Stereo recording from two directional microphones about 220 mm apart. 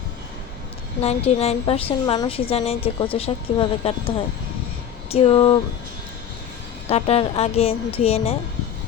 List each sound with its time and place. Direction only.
1.0 s a woman's voice: 30° left (ahead or behind)
6.8 s a woman's voice: 30° left (ahead or behind)